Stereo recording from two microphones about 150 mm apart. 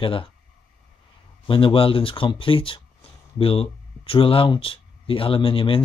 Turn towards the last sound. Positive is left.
turn(degrees=35)  # may be behind; listen again after turning